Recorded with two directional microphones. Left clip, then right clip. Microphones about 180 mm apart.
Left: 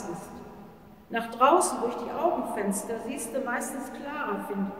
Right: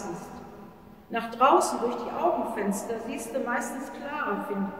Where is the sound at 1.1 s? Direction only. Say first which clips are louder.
Even; 15° left (ahead or behind).